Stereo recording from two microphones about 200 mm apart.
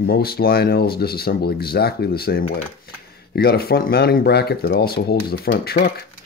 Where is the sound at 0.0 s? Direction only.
50° left (ahead or behind).